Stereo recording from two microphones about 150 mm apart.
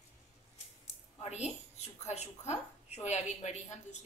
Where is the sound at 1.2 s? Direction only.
45° left (ahead or behind).